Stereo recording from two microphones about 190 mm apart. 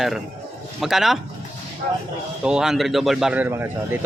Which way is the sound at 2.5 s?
5° right (ahead or behind).